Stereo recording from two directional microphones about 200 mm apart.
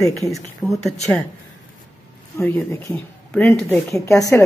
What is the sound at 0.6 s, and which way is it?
Speech, centre (ahead or behind).